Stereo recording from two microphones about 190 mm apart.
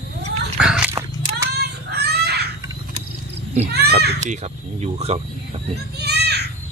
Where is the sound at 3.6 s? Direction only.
55° right (ahead or behind).